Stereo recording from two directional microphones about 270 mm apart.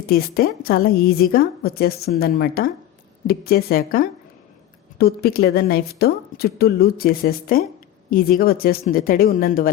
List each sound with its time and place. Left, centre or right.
0.1 s a woman's voice: left